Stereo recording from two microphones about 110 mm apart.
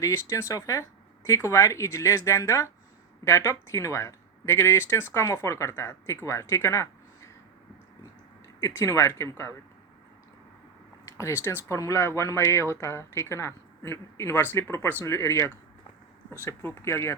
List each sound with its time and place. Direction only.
0.0 s speech: 30° left (ahead or behind)
8.6 s speech: 30° left (ahead or behind)
11.2 s speech: 20° left (ahead or behind)